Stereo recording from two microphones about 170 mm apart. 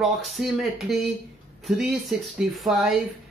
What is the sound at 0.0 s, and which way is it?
Speech, centre (ahead or behind).